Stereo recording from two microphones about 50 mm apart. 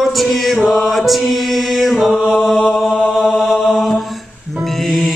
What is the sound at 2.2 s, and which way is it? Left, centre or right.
Chant, centre.